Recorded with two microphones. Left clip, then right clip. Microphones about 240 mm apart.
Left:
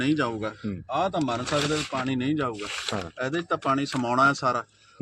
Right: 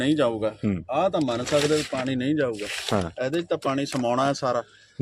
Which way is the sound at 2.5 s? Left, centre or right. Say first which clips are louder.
Right 3 dB; centre.